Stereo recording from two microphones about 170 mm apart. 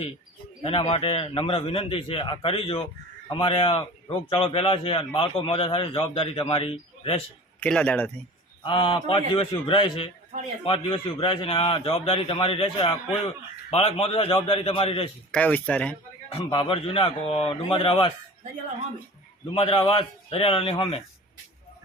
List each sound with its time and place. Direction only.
0.6 s a man's voice: 35° left (ahead or behind)
7.6 s speech: 10° left (ahead or behind)
8.6 s a man's voice: 30° left (ahead or behind)
15.3 s speech: 10° left (ahead or behind)
16.4 s a man's voice: 30° left (ahead or behind)
19.5 s a man's voice: 30° left (ahead or behind)